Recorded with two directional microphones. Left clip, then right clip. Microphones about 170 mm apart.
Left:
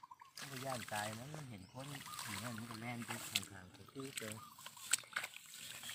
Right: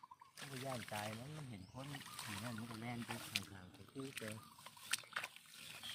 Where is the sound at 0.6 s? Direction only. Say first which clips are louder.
Left 3 dB; 10° right (ahead or behind).